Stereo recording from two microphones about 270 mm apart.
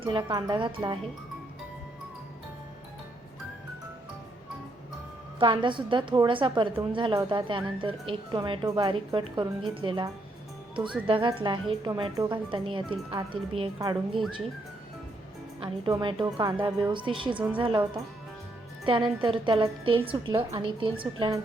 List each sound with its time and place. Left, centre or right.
0.0 s a woman's voice: centre
5.4 s a woman's voice: centre
15.6 s a woman's voice: centre